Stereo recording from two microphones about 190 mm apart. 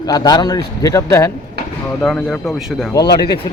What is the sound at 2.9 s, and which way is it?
Speech, 20° left (ahead or behind).